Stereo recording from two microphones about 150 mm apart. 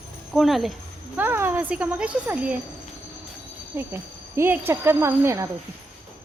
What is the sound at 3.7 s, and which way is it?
Speech, 15° right (ahead or behind).